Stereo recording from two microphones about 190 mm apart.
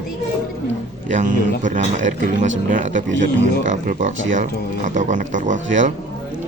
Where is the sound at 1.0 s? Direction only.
40° right (ahead or behind).